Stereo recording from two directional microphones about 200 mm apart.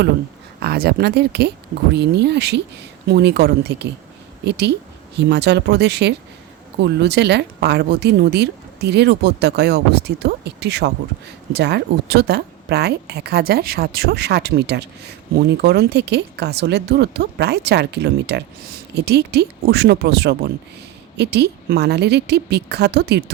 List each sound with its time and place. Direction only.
0.6 s speech: 55° right (ahead or behind)